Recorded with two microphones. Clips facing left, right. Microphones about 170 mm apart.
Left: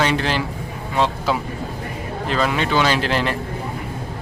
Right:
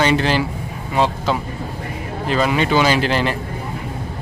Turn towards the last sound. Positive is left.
turn(degrees=0)  # may be behind; listen again after turning